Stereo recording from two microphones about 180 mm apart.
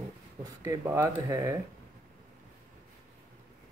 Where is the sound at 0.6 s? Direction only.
20° right (ahead or behind).